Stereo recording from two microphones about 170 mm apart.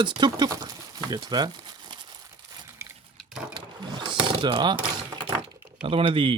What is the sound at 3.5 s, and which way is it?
Mechanisms, 25° right (ahead or behind).